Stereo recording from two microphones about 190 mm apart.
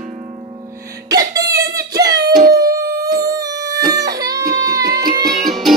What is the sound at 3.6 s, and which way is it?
Baby cry, 20° right (ahead or behind).